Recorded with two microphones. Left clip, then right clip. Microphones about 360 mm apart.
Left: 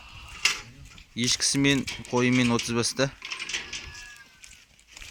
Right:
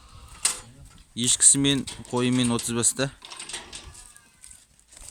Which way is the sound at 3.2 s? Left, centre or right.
Right.